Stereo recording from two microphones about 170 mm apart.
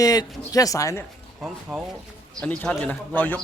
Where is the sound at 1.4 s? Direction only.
5° right (ahead or behind).